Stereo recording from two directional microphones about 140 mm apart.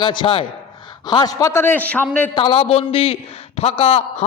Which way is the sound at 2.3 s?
40° left (ahead or behind).